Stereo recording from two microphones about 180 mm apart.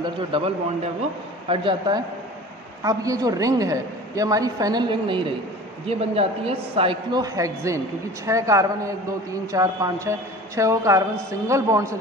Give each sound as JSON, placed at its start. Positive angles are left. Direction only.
{"t": 0.0, "sound": "a woman's voice", "side_deg": -30}
{"t": 1.5, "sound": "a woman's voice", "side_deg": -30}